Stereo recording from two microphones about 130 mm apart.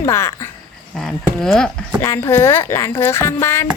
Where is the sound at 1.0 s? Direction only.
5° left (ahead or behind).